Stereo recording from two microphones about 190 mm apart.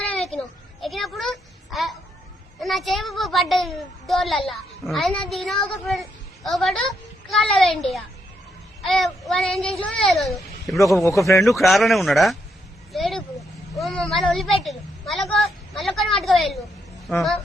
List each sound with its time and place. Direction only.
0.0 s a sound: 5° left (ahead or behind)
2.6 s a child's voice: centre (ahead or behind)
8.8 s child singing: centre (ahead or behind)
10.0 s a child's voice: centre (ahead or behind)
10.9 s a man's voice: 15° left (ahead or behind)
11.4 s a child's voice: centre (ahead or behind)
12.9 s a sound: centre (ahead or behind)
13.7 s a child's voice: centre (ahead or behind)